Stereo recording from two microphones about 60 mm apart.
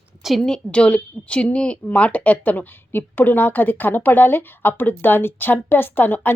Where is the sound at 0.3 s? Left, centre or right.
Centre.